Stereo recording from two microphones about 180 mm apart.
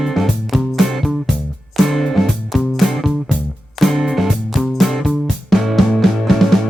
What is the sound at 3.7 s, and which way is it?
Music, centre (ahead or behind).